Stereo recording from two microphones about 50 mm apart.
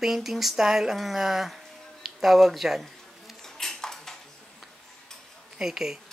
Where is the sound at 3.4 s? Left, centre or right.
Centre.